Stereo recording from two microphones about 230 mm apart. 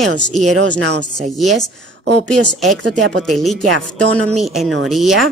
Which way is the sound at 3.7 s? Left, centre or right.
Right.